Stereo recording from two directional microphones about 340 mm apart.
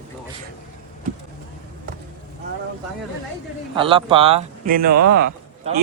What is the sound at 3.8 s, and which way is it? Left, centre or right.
Speech, centre.